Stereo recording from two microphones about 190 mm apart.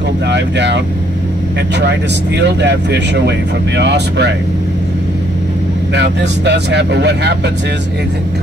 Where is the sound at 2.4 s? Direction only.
65° right (ahead or behind).